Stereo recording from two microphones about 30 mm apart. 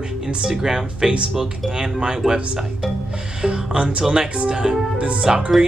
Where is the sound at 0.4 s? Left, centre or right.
Centre.